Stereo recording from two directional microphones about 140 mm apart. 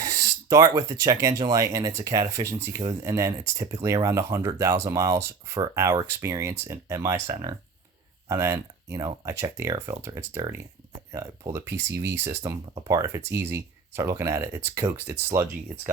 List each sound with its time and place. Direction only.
0.0 s speech: 25° right (ahead or behind)
8.3 s speech: 20° right (ahead or behind)